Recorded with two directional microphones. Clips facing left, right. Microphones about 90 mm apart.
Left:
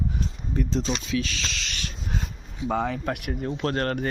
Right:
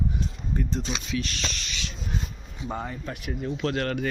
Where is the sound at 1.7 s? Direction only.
50° left (ahead or behind).